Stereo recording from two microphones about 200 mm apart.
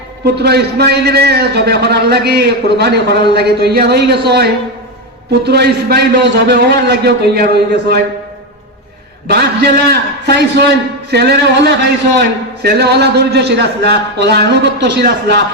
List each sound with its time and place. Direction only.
0.4 s a man's voice: 55° right (ahead or behind)
9.2 s a man's voice: 55° right (ahead or behind)